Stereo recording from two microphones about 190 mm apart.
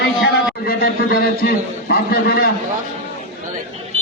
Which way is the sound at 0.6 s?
55° left (ahead or behind).